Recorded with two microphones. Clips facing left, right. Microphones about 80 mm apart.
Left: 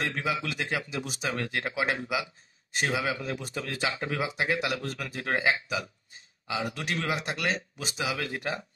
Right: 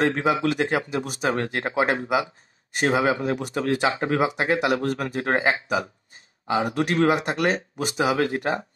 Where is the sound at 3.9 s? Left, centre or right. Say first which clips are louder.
Right 9 dB; right.